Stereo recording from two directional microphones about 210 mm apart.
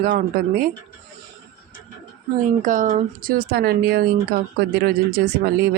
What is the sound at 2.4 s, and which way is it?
Speech, 40° right (ahead or behind).